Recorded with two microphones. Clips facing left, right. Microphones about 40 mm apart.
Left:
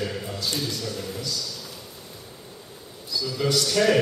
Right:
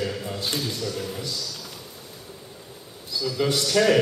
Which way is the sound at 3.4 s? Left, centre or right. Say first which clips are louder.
Left 1 dB; centre.